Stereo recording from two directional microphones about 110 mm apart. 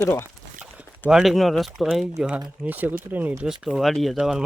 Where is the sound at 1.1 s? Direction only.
Centre (ahead or behind).